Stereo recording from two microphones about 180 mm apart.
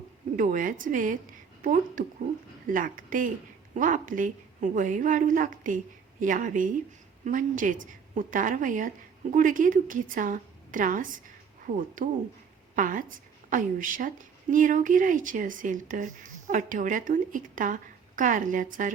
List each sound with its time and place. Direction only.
0.3 s a woman's voice: 45° right (ahead or behind)